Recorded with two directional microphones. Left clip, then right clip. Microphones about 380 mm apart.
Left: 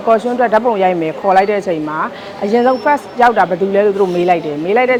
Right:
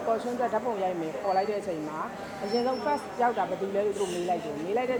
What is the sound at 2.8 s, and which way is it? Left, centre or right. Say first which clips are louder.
Speech: left 15 dB; left.